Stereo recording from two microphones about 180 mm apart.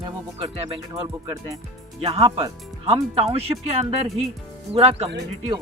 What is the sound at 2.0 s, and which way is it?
Speech, 35° right (ahead or behind).